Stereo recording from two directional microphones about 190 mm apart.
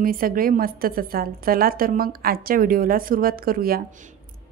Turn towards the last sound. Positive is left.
turn(degrees=-50)  # may be behind; listen again after turning